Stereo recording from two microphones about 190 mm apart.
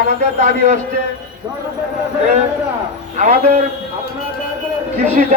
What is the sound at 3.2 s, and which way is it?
Speech, 35° right (ahead or behind).